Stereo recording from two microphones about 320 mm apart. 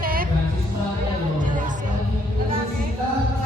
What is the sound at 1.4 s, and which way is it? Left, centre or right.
Music, right.